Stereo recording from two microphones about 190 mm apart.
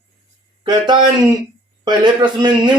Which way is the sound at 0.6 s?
25° right (ahead or behind).